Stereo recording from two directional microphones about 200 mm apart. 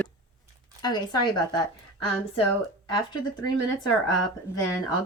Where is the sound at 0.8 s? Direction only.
20° left (ahead or behind).